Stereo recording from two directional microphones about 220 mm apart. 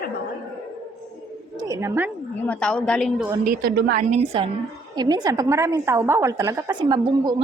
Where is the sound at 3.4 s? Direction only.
40° right (ahead or behind).